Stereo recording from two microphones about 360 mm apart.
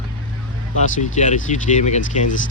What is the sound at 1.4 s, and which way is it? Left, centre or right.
Speech, centre.